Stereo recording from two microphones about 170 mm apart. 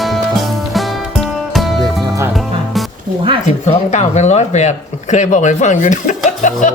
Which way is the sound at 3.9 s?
40° left (ahead or behind).